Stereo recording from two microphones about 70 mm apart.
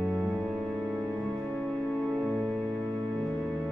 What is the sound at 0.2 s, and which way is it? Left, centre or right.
Music, right.